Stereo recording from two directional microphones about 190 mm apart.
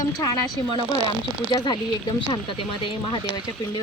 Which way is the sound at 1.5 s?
20° left (ahead or behind).